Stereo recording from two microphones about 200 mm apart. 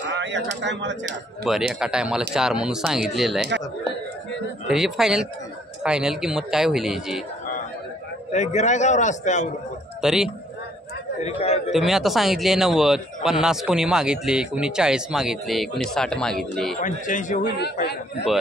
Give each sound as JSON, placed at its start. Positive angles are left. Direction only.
{"t": 0.1, "sound": "a sound", "side_deg": -65}
{"t": 0.6, "sound": "speech", "side_deg": -65}
{"t": 1.4, "sound": "a man's voice", "side_deg": 0}
{"t": 4.6, "sound": "a man's voice", "side_deg": 0}
{"t": 8.3, "sound": "a man's voice", "side_deg": 35}
{"t": 10.0, "sound": "a man's voice", "side_deg": -5}
{"t": 11.2, "sound": "a man's voice", "side_deg": 30}
{"t": 11.7, "sound": "a man's voice", "side_deg": 0}
{"t": 16.8, "sound": "a man's voice", "side_deg": 40}
{"t": 17.4, "sound": "a man's voice", "side_deg": 55}